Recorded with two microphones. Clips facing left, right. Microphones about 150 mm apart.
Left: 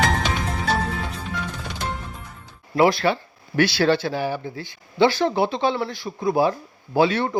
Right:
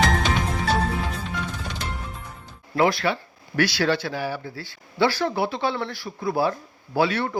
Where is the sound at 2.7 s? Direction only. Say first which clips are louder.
Left 3 dB; 25° left (ahead or behind).